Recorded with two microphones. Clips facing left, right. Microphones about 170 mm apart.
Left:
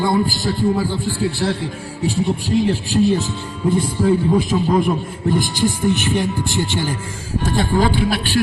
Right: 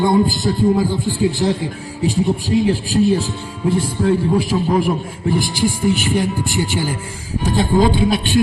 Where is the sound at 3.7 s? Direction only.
Centre (ahead or behind).